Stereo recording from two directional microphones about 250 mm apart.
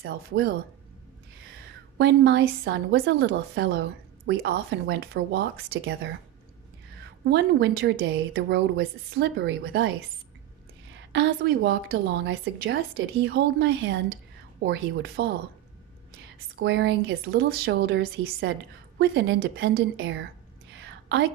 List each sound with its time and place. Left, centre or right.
2.0 s a woman's voice: right
7.2 s a woman's voice: right
11.1 s a woman's voice: right
16.5 s a woman's voice: right
20.8 s a sound: right